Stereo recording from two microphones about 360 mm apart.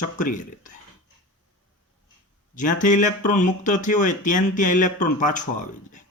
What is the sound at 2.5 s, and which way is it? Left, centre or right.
Speech, left.